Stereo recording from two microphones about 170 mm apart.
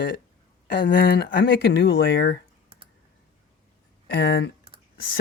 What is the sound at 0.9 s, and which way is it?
Speech, 75° left (ahead or behind).